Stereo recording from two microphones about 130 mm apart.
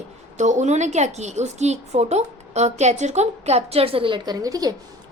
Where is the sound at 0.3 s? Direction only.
65° right (ahead or behind); by 4.7 s 30° right (ahead or behind).